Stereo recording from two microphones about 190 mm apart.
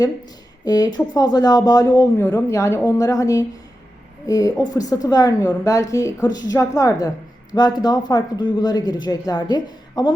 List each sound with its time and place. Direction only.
0.6 s speech: 20° left (ahead or behind)